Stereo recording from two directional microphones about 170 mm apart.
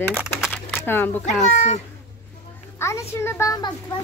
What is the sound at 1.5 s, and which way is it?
Speech, 45° left (ahead or behind).